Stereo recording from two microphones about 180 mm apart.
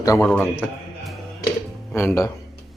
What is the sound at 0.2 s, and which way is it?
Speech, 10° left (ahead or behind).